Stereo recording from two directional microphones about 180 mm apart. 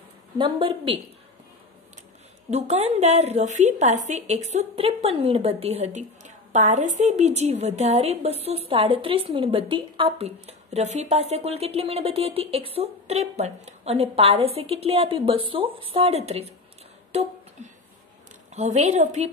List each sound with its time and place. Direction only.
0.4 s a woman's voice: 30° right (ahead or behind)
2.5 s a woman's voice: 35° right (ahead or behind)
18.5 s a woman's voice: 40° right (ahead or behind)